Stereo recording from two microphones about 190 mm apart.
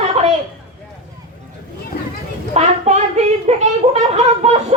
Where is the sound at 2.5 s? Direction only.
35° right (ahead or behind).